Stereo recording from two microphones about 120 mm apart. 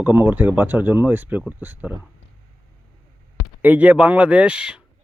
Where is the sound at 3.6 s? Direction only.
15° right (ahead or behind).